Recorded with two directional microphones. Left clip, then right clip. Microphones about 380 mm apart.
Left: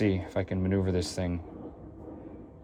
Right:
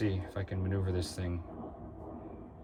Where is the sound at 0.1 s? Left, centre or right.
Centre.